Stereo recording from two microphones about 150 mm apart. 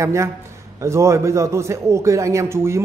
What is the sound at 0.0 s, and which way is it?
A man's voice, 20° right (ahead or behind).